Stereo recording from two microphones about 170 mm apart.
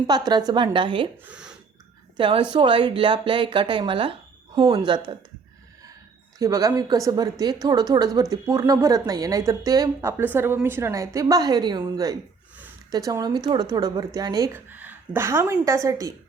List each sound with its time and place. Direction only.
0.1 s a woman's voice: 25° right (ahead or behind)
1.2 s speech: 5° right (ahead or behind)
2.1 s a woman's voice: 30° right (ahead or behind)
6.4 s a woman's voice: 20° right (ahead or behind)